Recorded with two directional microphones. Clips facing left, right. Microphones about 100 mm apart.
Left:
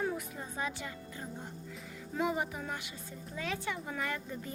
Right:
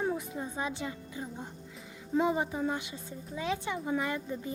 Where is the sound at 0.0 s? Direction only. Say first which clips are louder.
Right 3 dB; 20° right (ahead or behind).